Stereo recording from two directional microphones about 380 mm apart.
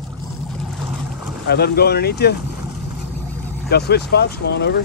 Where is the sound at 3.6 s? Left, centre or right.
Left.